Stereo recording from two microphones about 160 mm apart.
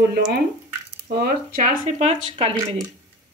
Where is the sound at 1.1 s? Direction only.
75° right (ahead or behind); by 2.1 s 50° right (ahead or behind).